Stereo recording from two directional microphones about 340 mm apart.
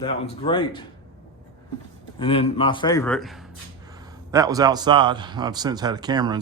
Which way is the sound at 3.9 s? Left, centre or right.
Centre.